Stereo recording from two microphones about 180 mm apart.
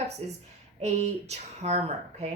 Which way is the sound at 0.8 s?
40° right (ahead or behind).